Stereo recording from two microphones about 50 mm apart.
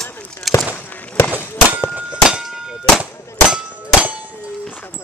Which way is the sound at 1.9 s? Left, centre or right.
Right.